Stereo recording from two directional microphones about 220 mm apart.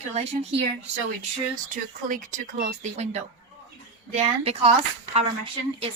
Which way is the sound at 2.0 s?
35° right (ahead or behind).